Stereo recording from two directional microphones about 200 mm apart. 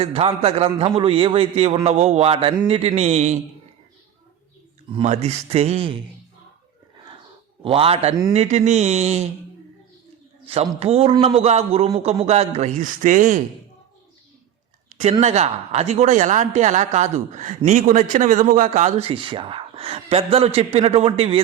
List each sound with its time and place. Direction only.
0.0 s a man's voice: 30° right (ahead or behind)
4.9 s a man's voice: 30° right (ahead or behind)
7.6 s a man's voice: 30° right (ahead or behind)
10.4 s a man's voice: 30° right (ahead or behind)
15.2 s a man's voice: 35° right (ahead or behind)